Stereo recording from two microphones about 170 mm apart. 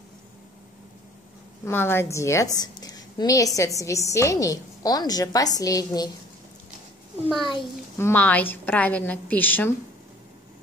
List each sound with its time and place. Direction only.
1.6 s a woman's voice: 15° left (ahead or behind)
8.0 s a woman's voice: 10° left (ahead or behind)